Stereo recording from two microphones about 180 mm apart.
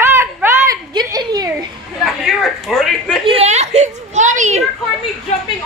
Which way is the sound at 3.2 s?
35° right (ahead or behind).